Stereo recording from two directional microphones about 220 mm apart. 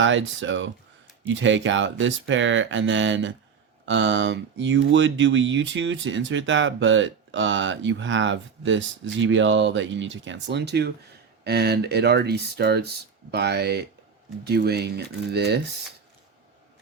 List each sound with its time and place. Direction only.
0.0 s speech: 60° right (ahead or behind)